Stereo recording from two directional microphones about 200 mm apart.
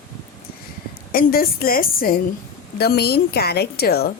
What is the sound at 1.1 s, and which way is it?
A woman's voice, 50° left (ahead or behind).